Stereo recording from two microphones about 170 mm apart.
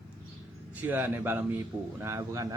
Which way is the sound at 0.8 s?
10° right (ahead or behind).